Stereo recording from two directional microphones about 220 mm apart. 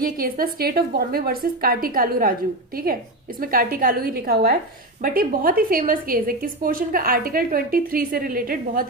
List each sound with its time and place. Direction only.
0.0 s a woman's voice: 40° right (ahead or behind)